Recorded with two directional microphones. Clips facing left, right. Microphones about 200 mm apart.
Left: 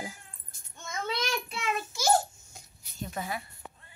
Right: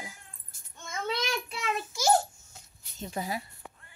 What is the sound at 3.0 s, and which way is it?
Speech, 30° right (ahead or behind).